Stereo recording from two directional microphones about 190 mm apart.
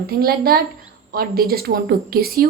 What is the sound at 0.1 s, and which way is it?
A woman's voice, 50° right (ahead or behind).